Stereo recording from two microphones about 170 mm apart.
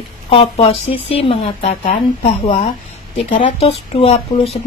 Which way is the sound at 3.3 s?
35° left (ahead or behind).